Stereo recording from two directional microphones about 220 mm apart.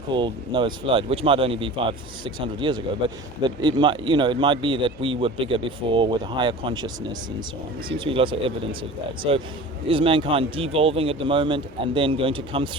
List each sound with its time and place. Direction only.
0.1 s speech: 20° right (ahead or behind)